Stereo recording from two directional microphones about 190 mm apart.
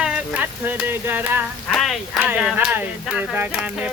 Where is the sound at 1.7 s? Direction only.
Centre (ahead or behind).